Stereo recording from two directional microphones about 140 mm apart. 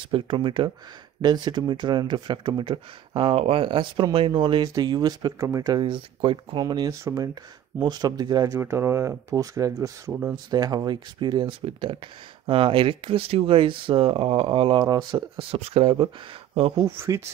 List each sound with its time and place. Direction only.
0.1 s speech: 40° right (ahead or behind)
16.8 s speech: 20° right (ahead or behind)